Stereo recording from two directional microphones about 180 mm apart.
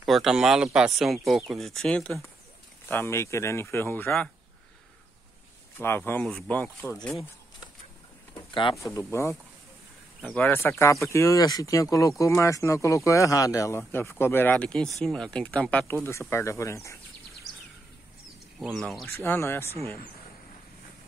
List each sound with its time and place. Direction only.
0.0 s speech: centre (ahead or behind)
5.8 s speech: 10° left (ahead or behind)
8.9 s speech: 15° left (ahead or behind)
18.6 s speech: centre (ahead or behind)
19.0 s speech: 10° left (ahead or behind)